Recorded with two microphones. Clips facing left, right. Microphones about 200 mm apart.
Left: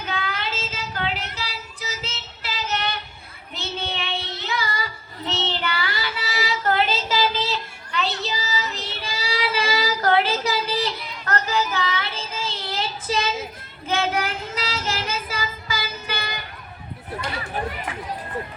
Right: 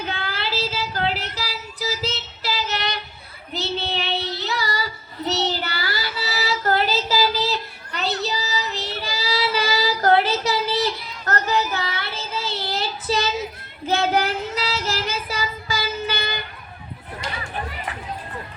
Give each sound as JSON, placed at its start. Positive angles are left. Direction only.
{"t": 0.0, "sound": "child singing", "side_deg": -35}
{"t": 14.8, "sound": "music", "side_deg": -35}